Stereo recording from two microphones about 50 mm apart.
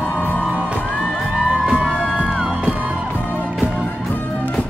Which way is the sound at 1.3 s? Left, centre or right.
Centre.